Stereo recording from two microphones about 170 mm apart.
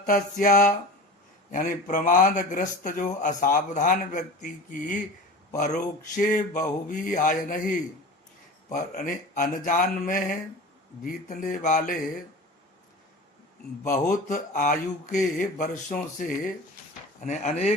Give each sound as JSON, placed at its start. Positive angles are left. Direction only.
{"t": 0.0, "sound": "speech", "side_deg": 50}
{"t": 8.7, "sound": "speech", "side_deg": 55}
{"t": 13.8, "sound": "speech", "side_deg": 50}